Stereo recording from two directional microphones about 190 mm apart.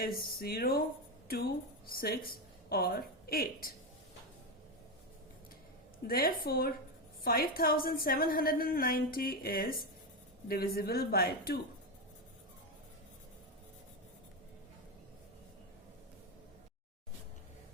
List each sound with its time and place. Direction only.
0.0 s a woman's voice: 50° left (ahead or behind)
1.9 s a woman's voice: 50° left (ahead or behind)
6.1 s a woman's voice: 50° left (ahead or behind)